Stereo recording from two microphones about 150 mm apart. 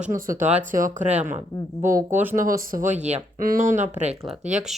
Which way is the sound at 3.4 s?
65° right (ahead or behind).